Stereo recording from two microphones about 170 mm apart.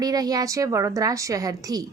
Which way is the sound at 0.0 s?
20° right (ahead or behind).